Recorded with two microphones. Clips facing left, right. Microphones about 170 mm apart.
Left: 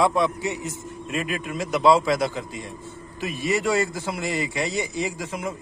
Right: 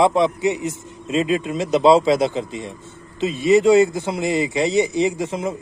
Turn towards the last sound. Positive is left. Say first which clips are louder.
# right 8 dB
turn(degrees=-25)  # may be behind; listen again after turning